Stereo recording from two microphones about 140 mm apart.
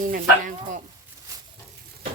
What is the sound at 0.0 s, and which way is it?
Speech, 70° right (ahead or behind).